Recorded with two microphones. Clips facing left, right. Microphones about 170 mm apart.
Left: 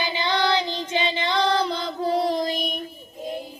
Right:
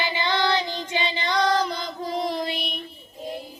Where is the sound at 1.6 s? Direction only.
30° left (ahead or behind).